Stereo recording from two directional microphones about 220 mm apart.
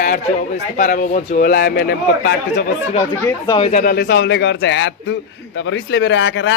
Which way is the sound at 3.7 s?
40° left (ahead or behind).